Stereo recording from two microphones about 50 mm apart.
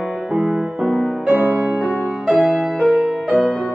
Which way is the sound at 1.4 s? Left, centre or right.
Right.